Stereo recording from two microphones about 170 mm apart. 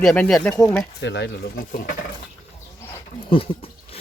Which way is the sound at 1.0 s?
90° left.